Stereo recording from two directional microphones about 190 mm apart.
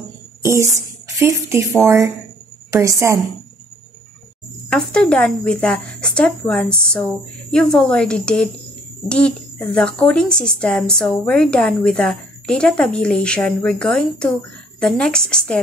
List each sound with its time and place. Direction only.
0.5 s a woman's voice: 15° right (ahead or behind)
4.6 s speech: 5° left (ahead or behind)